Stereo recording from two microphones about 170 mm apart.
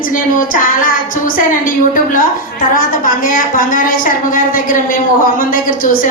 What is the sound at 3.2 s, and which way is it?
Speech, 55° left (ahead or behind).